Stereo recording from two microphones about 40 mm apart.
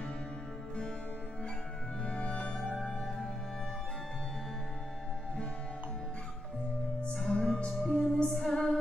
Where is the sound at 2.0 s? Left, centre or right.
Left.